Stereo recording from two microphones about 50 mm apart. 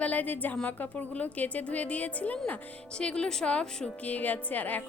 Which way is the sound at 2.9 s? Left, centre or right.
Centre.